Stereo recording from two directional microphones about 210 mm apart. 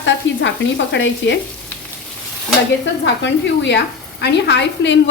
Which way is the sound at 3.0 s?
55° left (ahead or behind).